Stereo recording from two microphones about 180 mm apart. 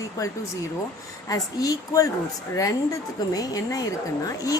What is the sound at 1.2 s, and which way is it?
A woman's voice, 20° left (ahead or behind).